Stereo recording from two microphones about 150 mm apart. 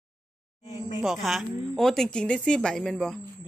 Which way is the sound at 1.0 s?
Centre (ahead or behind).